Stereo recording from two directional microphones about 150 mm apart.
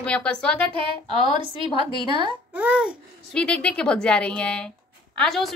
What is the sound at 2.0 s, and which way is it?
Speech, 30° right (ahead or behind).